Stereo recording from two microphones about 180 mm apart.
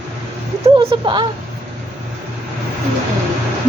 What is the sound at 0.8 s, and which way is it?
Speech, 25° right (ahead or behind).